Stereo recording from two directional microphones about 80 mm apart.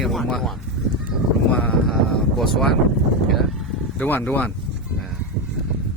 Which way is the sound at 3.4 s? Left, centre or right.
Centre.